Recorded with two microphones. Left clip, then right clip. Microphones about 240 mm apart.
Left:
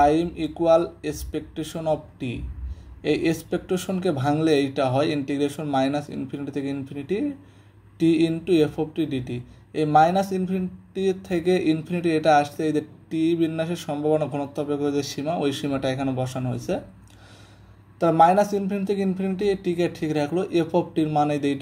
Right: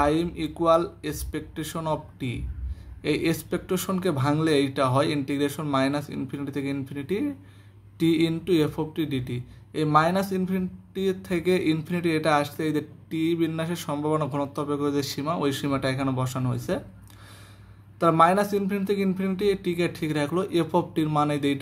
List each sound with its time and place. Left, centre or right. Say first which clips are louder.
0.0 s speech: left 4 dB; centre
17.9 s speech: left 3 dB; centre